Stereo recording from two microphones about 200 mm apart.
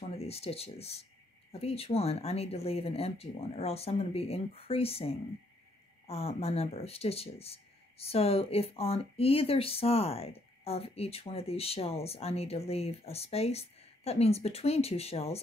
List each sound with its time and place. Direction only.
0.1 s speech: 30° left (ahead or behind)